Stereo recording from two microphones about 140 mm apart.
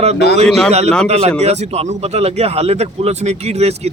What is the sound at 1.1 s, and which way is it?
Speech, 45° right (ahead or behind).